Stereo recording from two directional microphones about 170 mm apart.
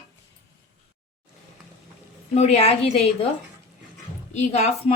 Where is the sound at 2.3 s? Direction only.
40° left (ahead or behind).